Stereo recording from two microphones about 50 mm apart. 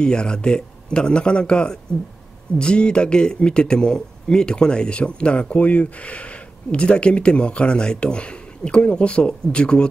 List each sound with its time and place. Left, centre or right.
0.0 s speech: centre